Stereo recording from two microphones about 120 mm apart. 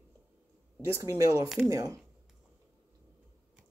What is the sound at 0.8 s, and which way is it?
Speech, 25° right (ahead or behind).